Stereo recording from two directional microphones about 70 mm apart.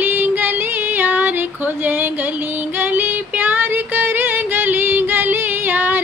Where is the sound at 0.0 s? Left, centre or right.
Right.